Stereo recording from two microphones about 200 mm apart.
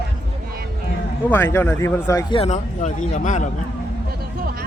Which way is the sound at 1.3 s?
10° left (ahead or behind).